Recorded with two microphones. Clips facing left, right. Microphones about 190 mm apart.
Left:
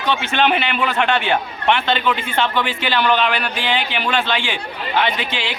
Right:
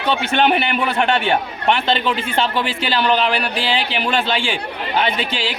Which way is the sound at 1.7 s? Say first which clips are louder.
Even; 35° right (ahead or behind).